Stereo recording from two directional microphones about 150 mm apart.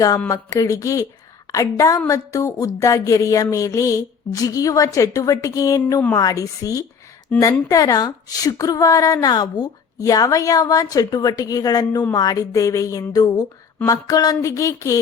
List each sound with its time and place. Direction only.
0.3 s speech: 20° left (ahead or behind)